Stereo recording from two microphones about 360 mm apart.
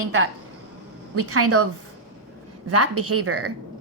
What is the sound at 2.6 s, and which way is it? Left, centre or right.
Speech, right.